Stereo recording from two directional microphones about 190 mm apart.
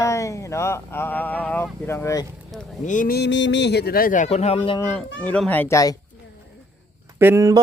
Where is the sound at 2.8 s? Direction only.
40° left (ahead or behind).